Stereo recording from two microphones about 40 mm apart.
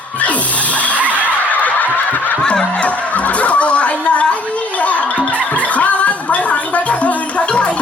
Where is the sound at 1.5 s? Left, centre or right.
Left.